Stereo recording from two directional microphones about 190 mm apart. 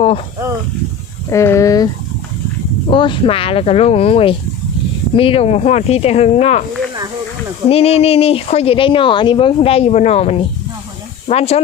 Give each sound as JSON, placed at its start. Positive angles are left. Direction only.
{"t": 1.3, "sound": "speech", "side_deg": 15}
{"t": 2.9, "sound": "speech", "side_deg": 25}
{"t": 7.7, "sound": "speech", "side_deg": 30}